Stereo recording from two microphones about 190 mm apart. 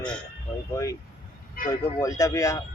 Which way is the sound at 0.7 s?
15° left (ahead or behind).